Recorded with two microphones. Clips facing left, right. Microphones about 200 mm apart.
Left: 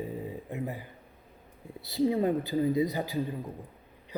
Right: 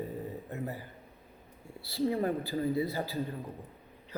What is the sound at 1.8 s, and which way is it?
A man's voice, 20° left (ahead or behind).